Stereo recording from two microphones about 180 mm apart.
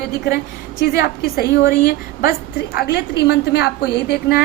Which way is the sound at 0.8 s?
60° left (ahead or behind).